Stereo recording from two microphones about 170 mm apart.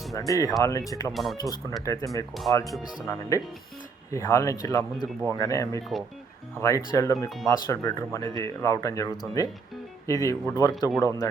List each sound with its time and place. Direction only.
0.1 s speech: 20° left (ahead or behind)
1.1 s speech: centre (ahead or behind)
1.8 s speech: 20° left (ahead or behind)